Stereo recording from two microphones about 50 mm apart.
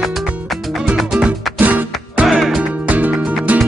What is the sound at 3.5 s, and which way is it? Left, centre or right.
Music, right.